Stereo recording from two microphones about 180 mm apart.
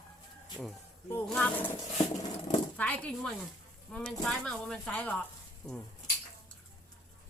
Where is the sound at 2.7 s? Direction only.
10° left (ahead or behind).